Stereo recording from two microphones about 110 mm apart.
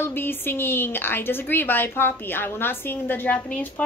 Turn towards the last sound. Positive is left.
turn(degrees=10)  # may be behind; listen again after turning